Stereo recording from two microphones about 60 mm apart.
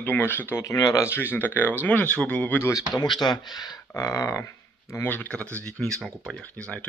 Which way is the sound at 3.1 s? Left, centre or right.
Left.